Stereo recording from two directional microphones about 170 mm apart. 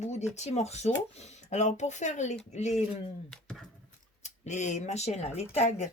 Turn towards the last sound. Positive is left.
turn(degrees=40)  # may be behind; listen again after turning